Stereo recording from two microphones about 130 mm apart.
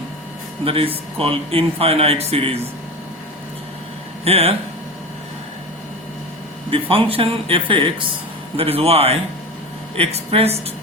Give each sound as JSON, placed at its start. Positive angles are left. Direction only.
{"t": 0.6, "sound": "speech", "side_deg": -45}
{"t": 4.2, "sound": "speech", "side_deg": -50}
{"t": 6.7, "sound": "speech", "side_deg": -45}